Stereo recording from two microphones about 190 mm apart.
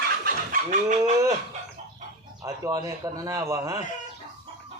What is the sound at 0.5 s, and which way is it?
Fowl, 40° right (ahead or behind).